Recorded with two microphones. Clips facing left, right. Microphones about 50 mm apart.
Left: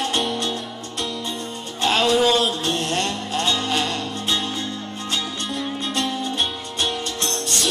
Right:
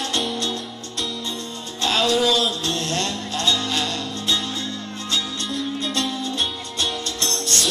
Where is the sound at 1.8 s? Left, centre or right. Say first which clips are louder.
Left 2 dB; left.